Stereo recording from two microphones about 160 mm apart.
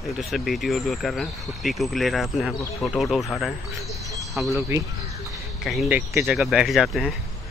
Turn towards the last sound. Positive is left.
turn(degrees=0)  # may be behind; listen again after turning